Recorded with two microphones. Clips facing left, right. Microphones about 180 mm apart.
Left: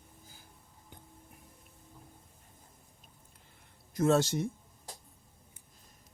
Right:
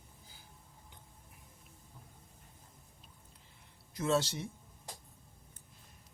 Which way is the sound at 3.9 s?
50° left (ahead or behind).